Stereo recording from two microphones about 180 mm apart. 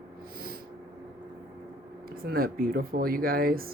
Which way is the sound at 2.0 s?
55° right (ahead or behind).